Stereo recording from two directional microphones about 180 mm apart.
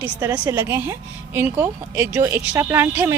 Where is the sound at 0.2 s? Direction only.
10° right (ahead or behind).